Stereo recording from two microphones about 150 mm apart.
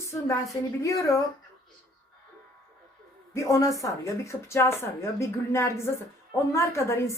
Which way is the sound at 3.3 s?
20° left (ahead or behind).